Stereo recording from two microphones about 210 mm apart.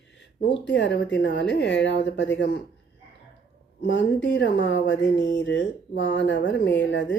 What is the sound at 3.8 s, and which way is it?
Speech, 55° left (ahead or behind).